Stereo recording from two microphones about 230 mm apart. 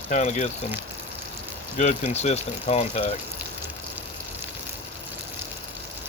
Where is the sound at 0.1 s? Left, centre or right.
Left.